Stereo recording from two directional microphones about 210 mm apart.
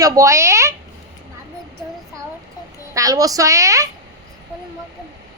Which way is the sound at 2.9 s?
15° right (ahead or behind).